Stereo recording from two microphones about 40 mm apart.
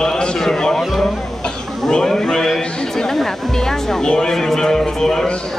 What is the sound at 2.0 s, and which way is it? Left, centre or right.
Speech, centre.